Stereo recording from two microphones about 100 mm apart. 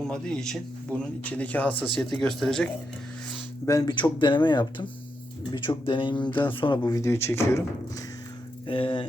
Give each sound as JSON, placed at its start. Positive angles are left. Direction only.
{"t": 0.1, "sound": "speech", "side_deg": 5}
{"t": 3.7, "sound": "speech", "side_deg": 35}
{"t": 3.9, "sound": "speech", "side_deg": 50}
{"t": 6.8, "sound": "speech", "side_deg": 35}
{"t": 8.6, "sound": "speech", "side_deg": 60}